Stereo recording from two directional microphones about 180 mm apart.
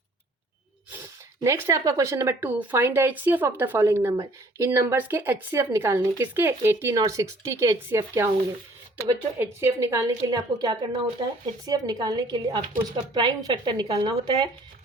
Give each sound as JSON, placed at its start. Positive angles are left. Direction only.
{"t": 1.4, "sound": "speech", "side_deg": -15}
{"t": 9.4, "sound": "a woman's voice", "side_deg": -15}